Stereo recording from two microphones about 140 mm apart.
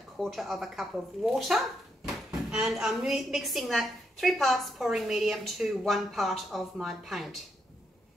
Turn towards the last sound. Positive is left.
turn(degrees=0)  # may be behind; listen again after turning